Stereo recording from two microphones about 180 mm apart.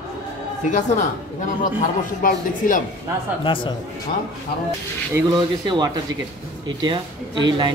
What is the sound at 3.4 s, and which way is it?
Speech, 25° left (ahead or behind).